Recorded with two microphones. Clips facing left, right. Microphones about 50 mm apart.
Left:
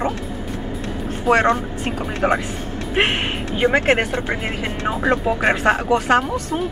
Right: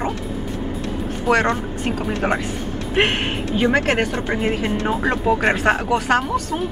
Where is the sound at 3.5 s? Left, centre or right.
Left.